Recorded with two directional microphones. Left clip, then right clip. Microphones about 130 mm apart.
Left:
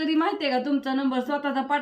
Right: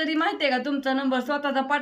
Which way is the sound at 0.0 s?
35° right (ahead or behind).